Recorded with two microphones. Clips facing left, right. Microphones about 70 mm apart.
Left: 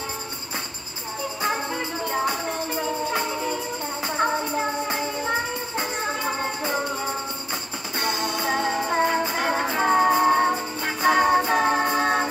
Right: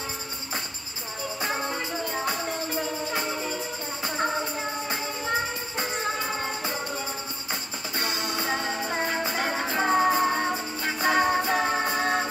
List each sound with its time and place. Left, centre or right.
2.0 s music: left
4.2 s music: left
8.0 s music: left
9.8 s music: centre; by 12.3 s left